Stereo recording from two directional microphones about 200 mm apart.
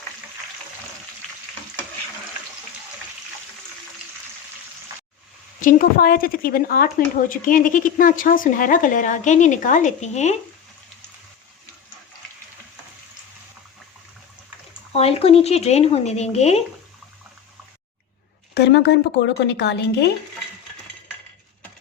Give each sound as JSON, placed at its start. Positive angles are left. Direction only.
{"t": 5.5, "sound": "speech", "side_deg": 40}
{"t": 14.7, "sound": "speech", "side_deg": 30}
{"t": 18.5, "sound": "a woman's voice", "side_deg": 55}